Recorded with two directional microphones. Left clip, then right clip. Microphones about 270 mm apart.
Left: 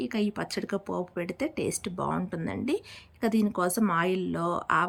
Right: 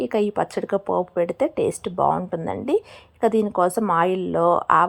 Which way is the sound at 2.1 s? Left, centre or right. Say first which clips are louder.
Right 9 dB; centre.